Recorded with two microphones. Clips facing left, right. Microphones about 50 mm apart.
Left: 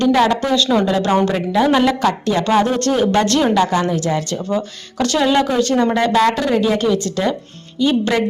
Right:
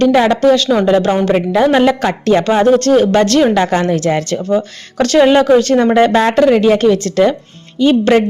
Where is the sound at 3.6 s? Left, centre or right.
Right.